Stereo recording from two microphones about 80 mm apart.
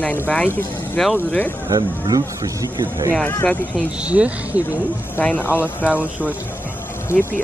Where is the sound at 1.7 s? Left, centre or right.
Right.